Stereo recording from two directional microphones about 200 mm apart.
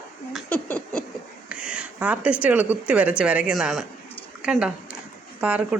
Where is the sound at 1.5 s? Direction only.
5° right (ahead or behind).